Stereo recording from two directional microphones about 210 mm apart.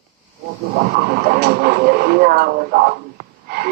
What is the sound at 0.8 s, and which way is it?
Speech, 50° right (ahead or behind).